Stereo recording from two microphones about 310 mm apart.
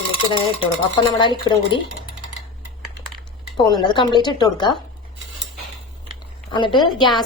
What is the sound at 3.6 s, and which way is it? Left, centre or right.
A woman's voice, centre.